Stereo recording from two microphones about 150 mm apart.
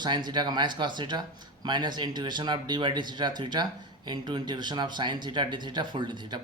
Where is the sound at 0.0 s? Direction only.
30° right (ahead or behind).